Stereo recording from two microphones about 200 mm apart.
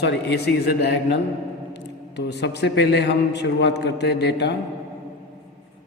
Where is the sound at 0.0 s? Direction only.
55° left (ahead or behind).